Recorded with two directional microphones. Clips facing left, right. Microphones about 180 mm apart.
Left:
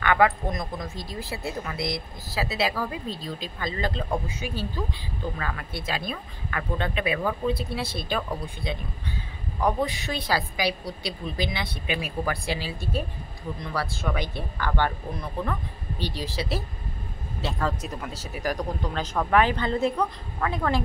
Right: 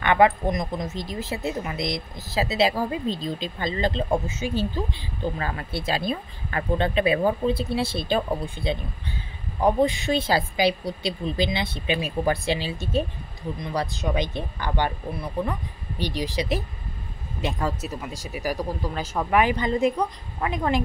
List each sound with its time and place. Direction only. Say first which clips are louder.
0.0 s speech: right 3 dB; 20° right (ahead or behind)
16.0 s speech: right 4 dB; 15° right (ahead or behind)